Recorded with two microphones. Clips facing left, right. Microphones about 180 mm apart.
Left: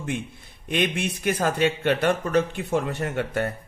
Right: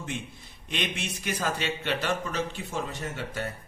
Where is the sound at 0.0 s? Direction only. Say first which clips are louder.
Left 6 dB; 55° left (ahead or behind).